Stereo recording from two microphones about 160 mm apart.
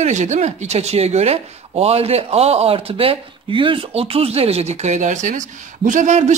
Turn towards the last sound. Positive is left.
turn(degrees=-45)  # may be behind; listen again after turning